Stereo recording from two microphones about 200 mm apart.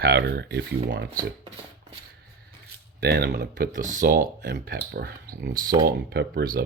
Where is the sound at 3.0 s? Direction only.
50° right (ahead or behind).